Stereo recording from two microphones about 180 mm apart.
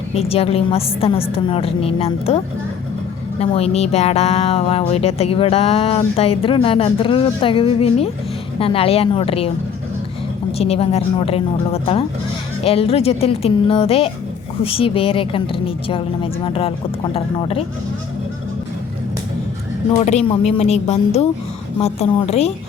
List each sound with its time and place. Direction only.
0.1 s speech: 35° left (ahead or behind)
3.4 s speech: 35° left (ahead or behind)
10.6 s speech: 35° left (ahead or behind)
20.0 s speech: 35° left (ahead or behind)